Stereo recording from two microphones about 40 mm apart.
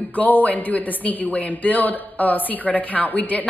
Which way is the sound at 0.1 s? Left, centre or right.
Left.